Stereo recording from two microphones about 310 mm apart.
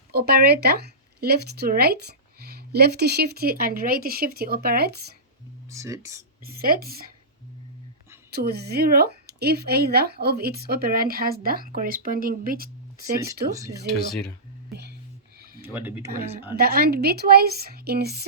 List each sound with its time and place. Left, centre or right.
0.1 s speech: right
5.7 s speech: centre
6.4 s speech: right
8.3 s speech: right
14.7 s music: right
15.6 s speech: centre
16.6 s a woman's voice: right